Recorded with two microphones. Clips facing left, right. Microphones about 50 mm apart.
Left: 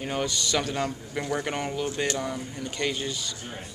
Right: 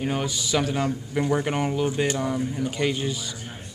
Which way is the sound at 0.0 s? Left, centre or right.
Centre.